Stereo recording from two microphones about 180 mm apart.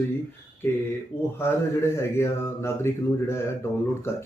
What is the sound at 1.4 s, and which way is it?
Speech, 15° left (ahead or behind).